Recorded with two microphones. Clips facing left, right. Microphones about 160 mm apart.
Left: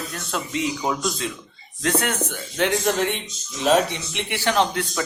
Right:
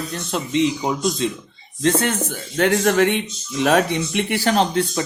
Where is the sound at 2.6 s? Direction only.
55° right (ahead or behind); by 5.0 s 30° right (ahead or behind).